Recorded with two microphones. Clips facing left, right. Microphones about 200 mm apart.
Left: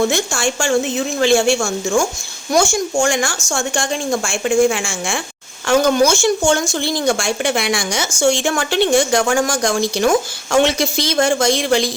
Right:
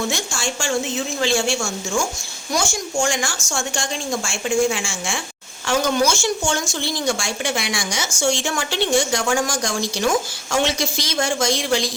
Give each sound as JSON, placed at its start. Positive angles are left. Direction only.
{"t": 0.1, "sound": "speech", "side_deg": 60}